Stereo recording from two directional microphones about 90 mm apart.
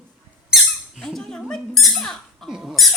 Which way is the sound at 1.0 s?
5° left (ahead or behind).